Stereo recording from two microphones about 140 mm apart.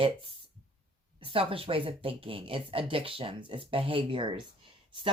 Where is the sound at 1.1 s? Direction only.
40° right (ahead or behind).